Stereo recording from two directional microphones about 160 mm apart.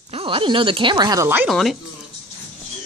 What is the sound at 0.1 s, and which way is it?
Speech, 35° right (ahead or behind).